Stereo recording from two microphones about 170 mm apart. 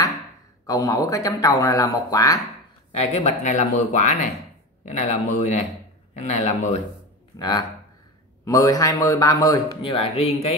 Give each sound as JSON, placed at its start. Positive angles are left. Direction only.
{"t": 0.7, "sound": "a man's voice", "side_deg": 20}
{"t": 2.9, "sound": "speech", "side_deg": 40}
{"t": 7.3, "sound": "a man's voice", "side_deg": 25}